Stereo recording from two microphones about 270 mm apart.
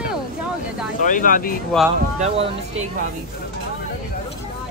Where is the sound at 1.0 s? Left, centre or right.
Left.